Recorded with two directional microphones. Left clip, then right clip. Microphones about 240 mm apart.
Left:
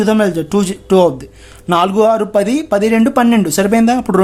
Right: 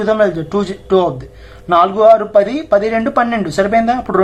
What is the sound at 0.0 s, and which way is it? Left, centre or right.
Speech, left.